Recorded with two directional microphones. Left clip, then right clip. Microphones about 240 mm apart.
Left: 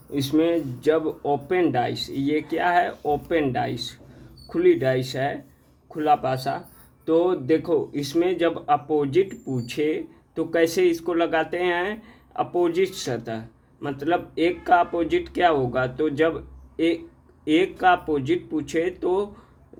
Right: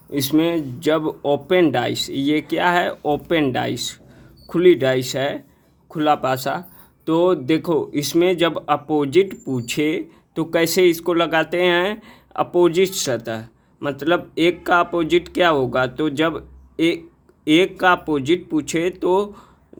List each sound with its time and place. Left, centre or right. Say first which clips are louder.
0.1 s speech: right 3 dB; right